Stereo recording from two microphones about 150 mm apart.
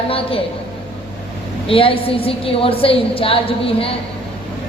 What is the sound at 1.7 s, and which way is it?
A woman's voice, 40° left (ahead or behind).